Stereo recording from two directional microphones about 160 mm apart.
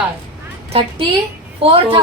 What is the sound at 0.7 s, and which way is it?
A woman's voice, 35° right (ahead or behind).